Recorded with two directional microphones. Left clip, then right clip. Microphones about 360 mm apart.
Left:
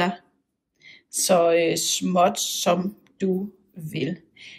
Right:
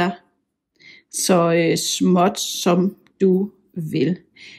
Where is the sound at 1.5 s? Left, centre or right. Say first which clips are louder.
Right 2 dB; centre.